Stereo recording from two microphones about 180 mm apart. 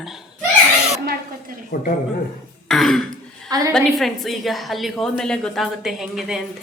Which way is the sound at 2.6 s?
Centre (ahead or behind).